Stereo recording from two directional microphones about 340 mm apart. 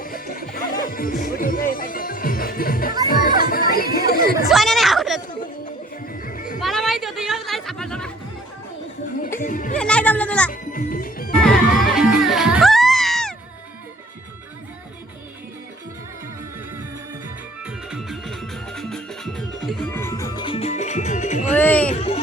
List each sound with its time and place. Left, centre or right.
0.3 s music: left
4.1 s a sound: left
4.4 s a sound: centre
6.2 s music: left
6.6 s chatter: centre
9.4 s music: left
9.7 s music: centre
10.5 s music: left
11.9 s music: centre
17.9 s music: centre; by 21.5 s left
21.5 s a sound: centre
21.9 s music: centre